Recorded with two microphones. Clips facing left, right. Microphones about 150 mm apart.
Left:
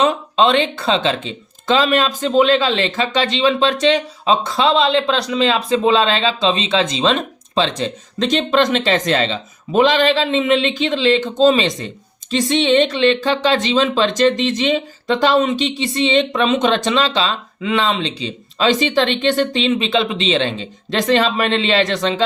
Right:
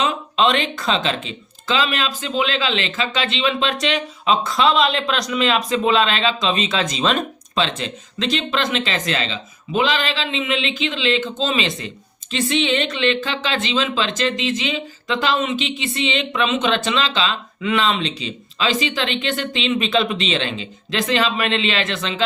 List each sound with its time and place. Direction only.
0.0 s speech: 35° left (ahead or behind)